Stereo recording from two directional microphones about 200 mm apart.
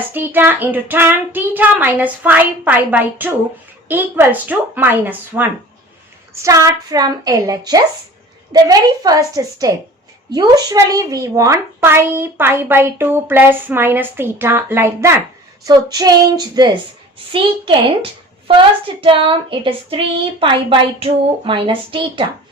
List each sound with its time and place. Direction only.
0.1 s a woman's voice: 10° right (ahead or behind); by 22.3 s 25° right (ahead or behind)